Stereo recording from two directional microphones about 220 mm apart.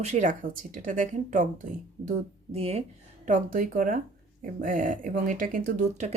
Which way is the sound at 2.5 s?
25° right (ahead or behind).